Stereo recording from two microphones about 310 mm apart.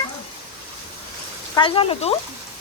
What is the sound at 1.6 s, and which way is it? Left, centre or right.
Speech, centre.